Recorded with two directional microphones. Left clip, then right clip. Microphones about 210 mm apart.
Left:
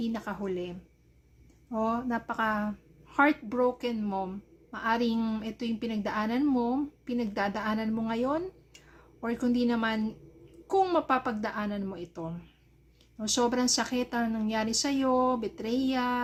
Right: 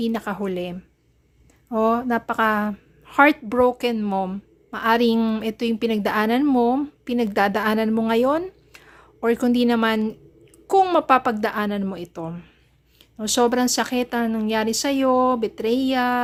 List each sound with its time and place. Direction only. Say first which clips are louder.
0.0 s a woman's voice: right 9 dB; 35° right (ahead or behind)